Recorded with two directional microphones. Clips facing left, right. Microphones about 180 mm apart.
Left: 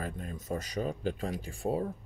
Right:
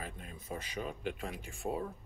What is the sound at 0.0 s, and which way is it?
Speech, 45° left (ahead or behind).